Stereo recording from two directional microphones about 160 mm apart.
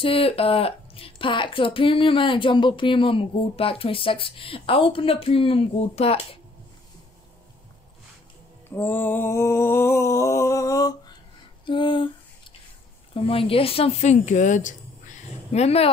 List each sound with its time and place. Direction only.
0.0 s speech: 35° left (ahead or behind)
8.6 s a sound: 15° left (ahead or behind); by 12.1 s 30° left (ahead or behind)
13.1 s a woman's voice: 35° left (ahead or behind)